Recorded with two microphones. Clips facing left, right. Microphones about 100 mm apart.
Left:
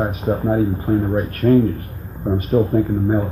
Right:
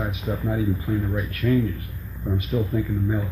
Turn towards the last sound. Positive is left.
turn(degrees=45)  # may be behind; listen again after turning